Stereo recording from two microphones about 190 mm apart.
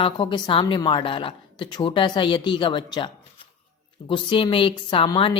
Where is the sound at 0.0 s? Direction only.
25° left (ahead or behind).